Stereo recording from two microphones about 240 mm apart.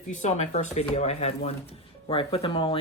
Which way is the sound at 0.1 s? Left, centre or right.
Left.